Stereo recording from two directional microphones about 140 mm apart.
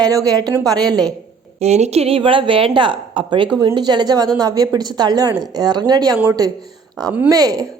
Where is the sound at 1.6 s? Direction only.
50° right (ahead or behind); by 6.1 s 30° right (ahead or behind).